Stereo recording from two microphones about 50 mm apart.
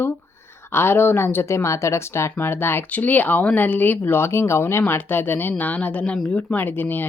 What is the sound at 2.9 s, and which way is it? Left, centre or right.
Speech, left.